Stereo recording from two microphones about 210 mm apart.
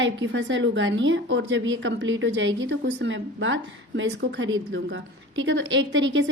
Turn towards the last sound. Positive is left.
turn(degrees=-65)  # may be behind; listen again after turning